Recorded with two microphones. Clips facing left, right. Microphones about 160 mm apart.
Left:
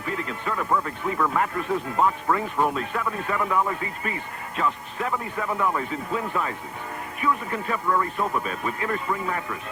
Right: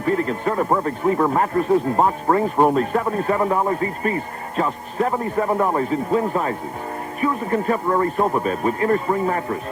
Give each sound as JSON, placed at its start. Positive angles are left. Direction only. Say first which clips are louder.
{"t": 0.0, "sound": "speech", "louder": "right 10 dB", "side_deg": -40}